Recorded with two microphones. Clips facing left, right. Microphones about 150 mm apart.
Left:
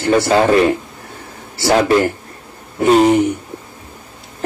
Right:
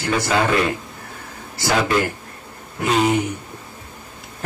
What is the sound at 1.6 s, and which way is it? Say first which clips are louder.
A man's voice: left 7 dB; 30° left (ahead or behind).